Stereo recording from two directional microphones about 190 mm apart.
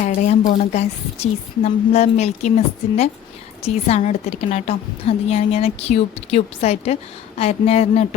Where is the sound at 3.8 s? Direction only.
35° left (ahead or behind).